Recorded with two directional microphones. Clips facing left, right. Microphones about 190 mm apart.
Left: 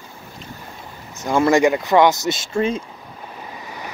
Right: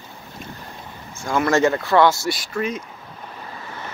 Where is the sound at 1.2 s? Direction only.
20° left (ahead or behind).